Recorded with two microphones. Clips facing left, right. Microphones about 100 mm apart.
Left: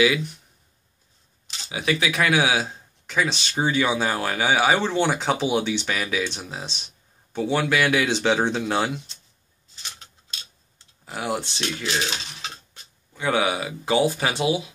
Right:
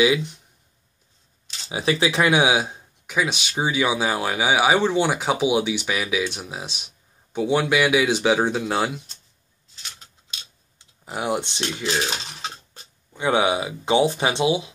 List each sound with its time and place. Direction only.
0.0 s speech: 25° right (ahead or behind)
1.7 s speech: 25° right (ahead or behind); by 9.0 s centre (ahead or behind)
10.8 s speech: 20° right (ahead or behind)
12.4 s speech: 35° right (ahead or behind)